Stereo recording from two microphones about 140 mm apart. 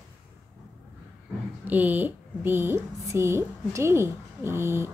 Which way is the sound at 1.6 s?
10° right (ahead or behind).